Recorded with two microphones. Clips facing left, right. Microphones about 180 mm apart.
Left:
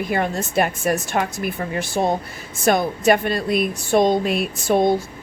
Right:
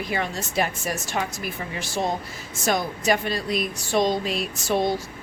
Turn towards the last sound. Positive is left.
turn(degrees=55)  # may be behind; listen again after turning